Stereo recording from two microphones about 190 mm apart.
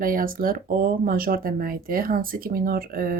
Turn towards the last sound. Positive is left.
turn(degrees=-50)  # may be behind; listen again after turning